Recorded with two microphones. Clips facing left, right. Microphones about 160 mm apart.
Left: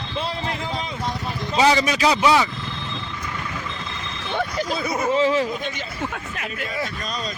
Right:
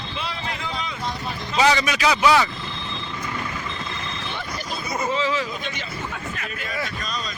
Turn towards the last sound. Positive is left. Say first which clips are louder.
# left 4 dB
turn(degrees=50)  # may be behind; listen again after turning